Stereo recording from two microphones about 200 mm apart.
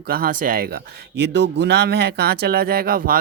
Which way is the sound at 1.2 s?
55° right (ahead or behind).